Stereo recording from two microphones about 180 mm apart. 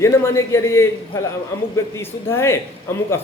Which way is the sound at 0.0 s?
15° left (ahead or behind).